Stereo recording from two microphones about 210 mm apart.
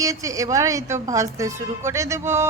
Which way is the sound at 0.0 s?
15° right (ahead or behind).